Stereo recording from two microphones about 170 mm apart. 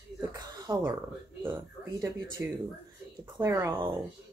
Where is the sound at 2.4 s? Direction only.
10° right (ahead or behind).